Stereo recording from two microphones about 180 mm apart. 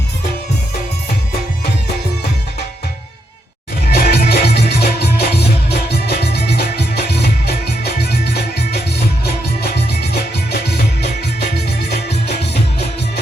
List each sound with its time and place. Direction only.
3.9 s music: 60° left (ahead or behind)